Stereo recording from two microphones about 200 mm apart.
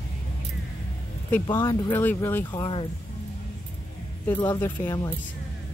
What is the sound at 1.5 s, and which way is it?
Speech, 25° left (ahead or behind).